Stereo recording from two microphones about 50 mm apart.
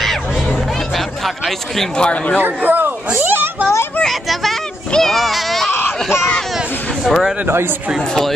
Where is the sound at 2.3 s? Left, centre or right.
Right.